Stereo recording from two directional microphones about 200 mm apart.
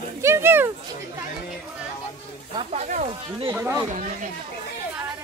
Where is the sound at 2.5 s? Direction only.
35° right (ahead or behind).